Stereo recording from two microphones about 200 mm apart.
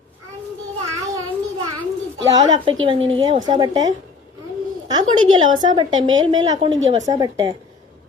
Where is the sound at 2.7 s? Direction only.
25° right (ahead or behind).